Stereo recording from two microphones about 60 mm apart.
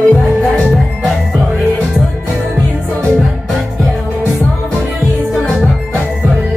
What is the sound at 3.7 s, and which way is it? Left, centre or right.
Music, centre.